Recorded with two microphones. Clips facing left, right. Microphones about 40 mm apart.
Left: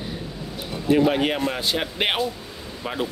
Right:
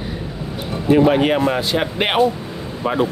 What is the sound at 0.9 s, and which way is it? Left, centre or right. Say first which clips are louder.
Speech: right 5 dB; centre.